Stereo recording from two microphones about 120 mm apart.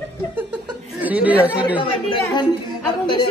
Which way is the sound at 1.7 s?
45° left (ahead or behind).